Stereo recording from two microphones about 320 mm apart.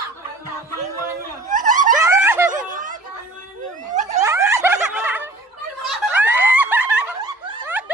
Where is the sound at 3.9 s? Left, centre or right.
Right.